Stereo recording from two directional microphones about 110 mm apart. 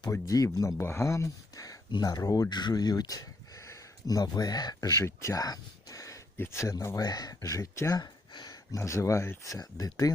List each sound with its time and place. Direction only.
0.1 s speech: 30° left (ahead or behind)